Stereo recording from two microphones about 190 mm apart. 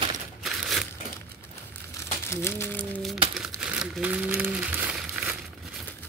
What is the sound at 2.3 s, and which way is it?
Speech, 10° left (ahead or behind).